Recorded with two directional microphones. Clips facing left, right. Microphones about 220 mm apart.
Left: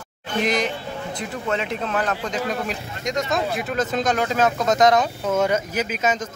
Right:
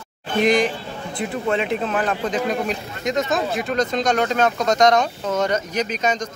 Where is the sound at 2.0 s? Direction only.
20° right (ahead or behind).